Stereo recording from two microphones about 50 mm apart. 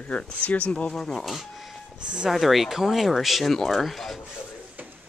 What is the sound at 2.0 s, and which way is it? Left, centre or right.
Speech, centre.